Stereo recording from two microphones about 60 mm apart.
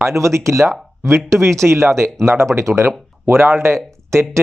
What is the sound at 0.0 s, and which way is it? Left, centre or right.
Speech, right.